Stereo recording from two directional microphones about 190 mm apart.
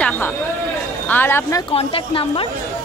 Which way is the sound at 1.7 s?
30° left (ahead or behind).